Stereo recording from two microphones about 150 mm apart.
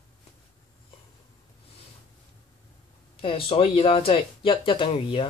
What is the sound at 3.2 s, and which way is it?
Speech, 40° left (ahead or behind).